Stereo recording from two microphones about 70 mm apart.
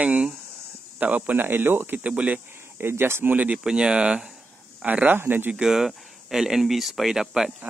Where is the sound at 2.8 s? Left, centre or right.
Right.